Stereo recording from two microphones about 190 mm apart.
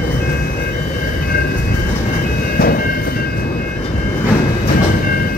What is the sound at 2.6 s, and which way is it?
Train, 50° left (ahead or behind).